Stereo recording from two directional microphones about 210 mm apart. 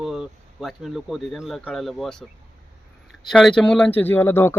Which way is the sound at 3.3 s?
Centre (ahead or behind).